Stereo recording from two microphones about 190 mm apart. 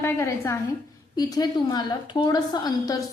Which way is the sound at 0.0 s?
15° left (ahead or behind).